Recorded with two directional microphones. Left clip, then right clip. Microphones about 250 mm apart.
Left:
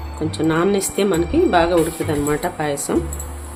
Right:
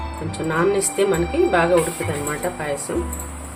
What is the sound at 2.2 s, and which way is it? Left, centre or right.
Speech, left.